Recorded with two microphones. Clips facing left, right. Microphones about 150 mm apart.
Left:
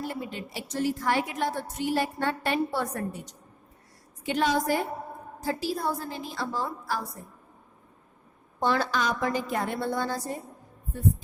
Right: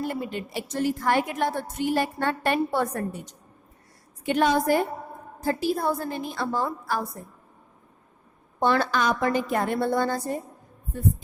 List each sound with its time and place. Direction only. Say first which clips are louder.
0.0 s a woman's voice: right 4 dB; 55° right (ahead or behind)
4.3 s a woman's voice: right 4 dB; 55° right (ahead or behind)
8.6 s a woman's voice: right 3 dB; 60° right (ahead or behind)